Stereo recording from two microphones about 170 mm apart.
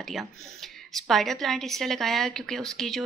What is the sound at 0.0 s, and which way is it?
Speech, centre (ahead or behind).